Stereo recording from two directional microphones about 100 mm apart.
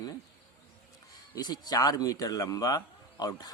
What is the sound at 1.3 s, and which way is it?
Speech, 40° left (ahead or behind).